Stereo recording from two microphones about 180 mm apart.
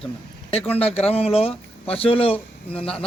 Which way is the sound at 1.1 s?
35° left (ahead or behind).